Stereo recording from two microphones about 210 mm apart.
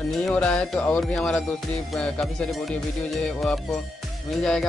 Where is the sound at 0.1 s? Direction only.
5° left (ahead or behind).